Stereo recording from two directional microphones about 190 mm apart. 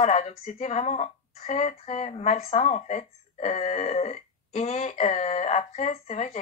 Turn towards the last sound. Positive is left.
turn(degrees=35)  # may be behind; listen again after turning